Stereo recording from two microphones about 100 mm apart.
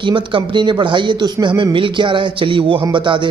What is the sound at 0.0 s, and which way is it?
Speech, 55° right (ahead or behind).